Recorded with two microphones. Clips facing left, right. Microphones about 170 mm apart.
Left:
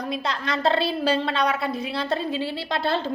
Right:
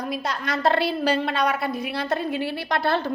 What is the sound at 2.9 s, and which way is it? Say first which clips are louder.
Speech: right 1 dB; 55° right (ahead or behind).